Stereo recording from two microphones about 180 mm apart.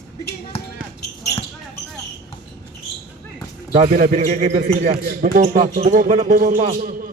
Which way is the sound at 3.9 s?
50° right (ahead or behind).